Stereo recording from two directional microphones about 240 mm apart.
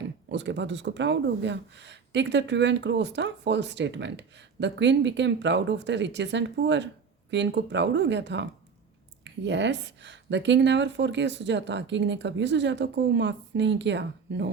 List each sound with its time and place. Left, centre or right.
0.3 s speech: right